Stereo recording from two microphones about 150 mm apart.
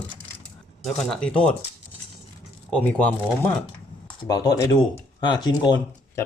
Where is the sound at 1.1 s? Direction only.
5° left (ahead or behind).